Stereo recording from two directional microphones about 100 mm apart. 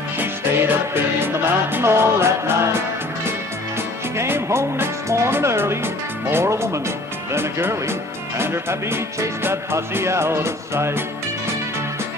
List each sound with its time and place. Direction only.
0.2 s music: 20° right (ahead or behind)
4.2 s music: 25° right (ahead or behind)